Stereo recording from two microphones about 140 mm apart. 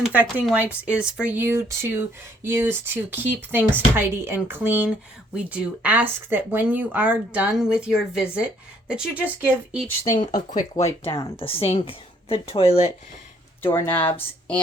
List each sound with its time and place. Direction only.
0.0 s speech: 10° right (ahead or behind)
10.3 s speech: 65° left (ahead or behind)
11.3 s speech: 40° left (ahead or behind)
13.6 s speech: 15° left (ahead or behind)